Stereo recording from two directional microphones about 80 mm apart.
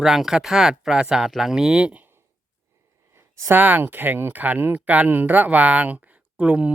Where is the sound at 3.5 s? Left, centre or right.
Right.